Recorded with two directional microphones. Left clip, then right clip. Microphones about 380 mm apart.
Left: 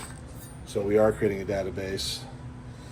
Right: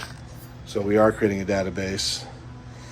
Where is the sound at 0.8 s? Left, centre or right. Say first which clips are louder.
Right 3 dB; right.